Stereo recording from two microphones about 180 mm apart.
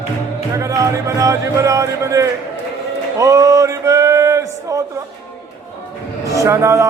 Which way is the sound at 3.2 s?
20° right (ahead or behind).